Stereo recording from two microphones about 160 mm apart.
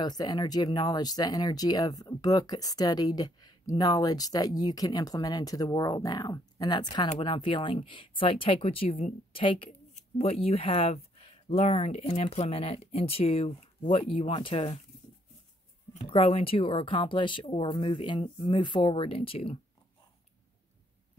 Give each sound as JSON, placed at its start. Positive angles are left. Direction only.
{"t": 0.0, "sound": "speech", "side_deg": 25}
{"t": 16.0, "sound": "speech", "side_deg": 35}